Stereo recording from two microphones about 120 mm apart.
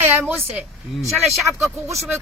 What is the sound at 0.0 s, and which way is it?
Speech, 20° right (ahead or behind).